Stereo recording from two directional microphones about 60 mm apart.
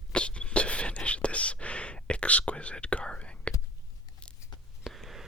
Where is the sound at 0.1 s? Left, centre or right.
Centre.